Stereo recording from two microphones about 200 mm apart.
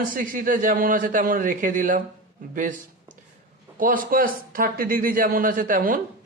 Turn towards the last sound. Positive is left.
turn(degrees=-45)  # may be behind; listen again after turning